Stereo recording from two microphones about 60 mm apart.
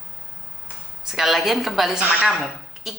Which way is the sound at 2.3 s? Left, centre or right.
Centre.